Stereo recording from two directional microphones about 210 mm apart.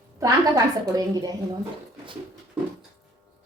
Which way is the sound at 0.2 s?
15° right (ahead or behind).